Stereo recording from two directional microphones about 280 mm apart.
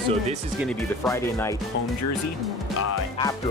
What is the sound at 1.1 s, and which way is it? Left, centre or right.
Speech, centre.